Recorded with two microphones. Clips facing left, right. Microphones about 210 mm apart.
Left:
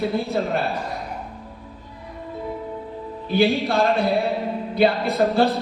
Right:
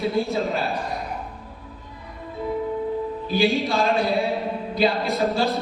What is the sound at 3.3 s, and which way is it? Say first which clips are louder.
A man's voice: left 3 dB; 60° left (ahead or behind).